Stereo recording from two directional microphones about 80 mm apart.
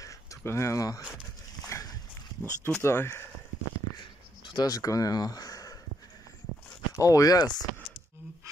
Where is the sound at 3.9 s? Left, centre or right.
Left.